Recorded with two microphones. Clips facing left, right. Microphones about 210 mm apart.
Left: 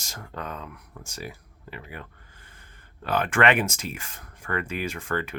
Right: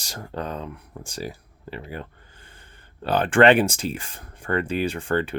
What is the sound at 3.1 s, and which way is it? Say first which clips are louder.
Speech: right 6 dB; 30° right (ahead or behind).